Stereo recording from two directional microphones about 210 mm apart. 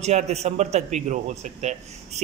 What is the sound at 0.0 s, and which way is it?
A man's voice, 30° right (ahead or behind).